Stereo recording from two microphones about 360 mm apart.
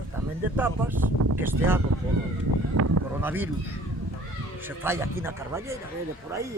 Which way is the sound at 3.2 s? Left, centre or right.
Centre.